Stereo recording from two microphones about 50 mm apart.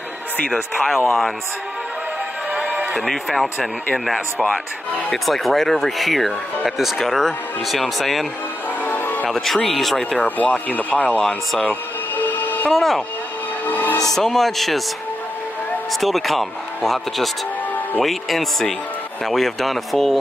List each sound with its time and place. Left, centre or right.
0.5 s speech: centre
2.5 s a sound: right
3.1 s speech: centre
8.8 s music: left
9.3 s speech: centre
10.2 s speech: left
11.2 s speech: centre
12.2 s train: left
12.7 s speech: centre
13.7 s music: left
14.1 s speech: centre
15.9 s speech: centre